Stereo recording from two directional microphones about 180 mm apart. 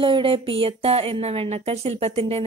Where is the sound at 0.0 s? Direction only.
30° right (ahead or behind).